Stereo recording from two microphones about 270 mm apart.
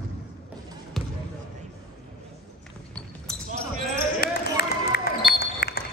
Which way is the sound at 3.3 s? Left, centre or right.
Centre.